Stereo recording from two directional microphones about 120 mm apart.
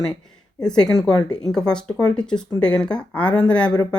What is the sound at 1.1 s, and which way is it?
Speech, 30° left (ahead or behind).